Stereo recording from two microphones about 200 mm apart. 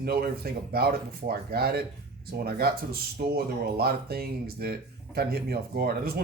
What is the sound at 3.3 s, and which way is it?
Speech, 50° right (ahead or behind).